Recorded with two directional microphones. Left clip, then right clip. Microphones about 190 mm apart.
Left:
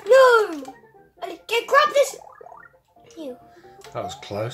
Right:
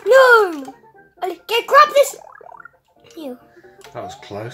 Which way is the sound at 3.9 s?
10° left (ahead or behind).